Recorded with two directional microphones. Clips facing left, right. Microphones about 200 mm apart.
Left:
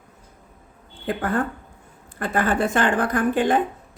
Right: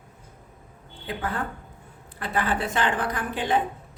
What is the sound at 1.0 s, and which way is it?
A woman's voice, 50° left (ahead or behind).